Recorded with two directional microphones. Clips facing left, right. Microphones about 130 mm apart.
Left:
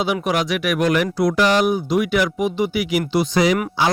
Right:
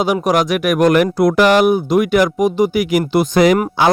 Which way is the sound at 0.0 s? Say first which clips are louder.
Right 5 dB; 45° right (ahead or behind).